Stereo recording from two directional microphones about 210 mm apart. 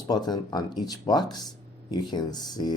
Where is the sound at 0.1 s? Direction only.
20° left (ahead or behind).